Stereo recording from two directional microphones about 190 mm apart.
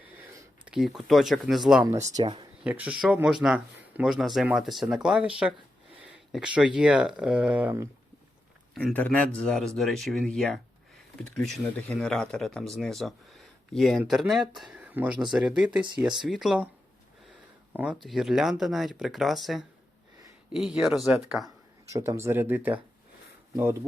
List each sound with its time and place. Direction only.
0.3 s speech: 5° right (ahead or behind)
1.8 s speech: 15° right (ahead or behind)
2.6 s speech: 5° right (ahead or behind)
8.7 s speech: 10° left (ahead or behind)
17.7 s speech: 5° right (ahead or behind)
21.9 s speech: 15° right (ahead or behind)